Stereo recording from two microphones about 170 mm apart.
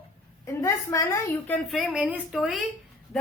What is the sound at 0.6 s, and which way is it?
Speech, 15° left (ahead or behind).